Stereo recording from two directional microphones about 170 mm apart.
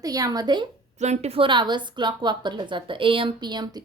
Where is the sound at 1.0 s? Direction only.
40° right (ahead or behind).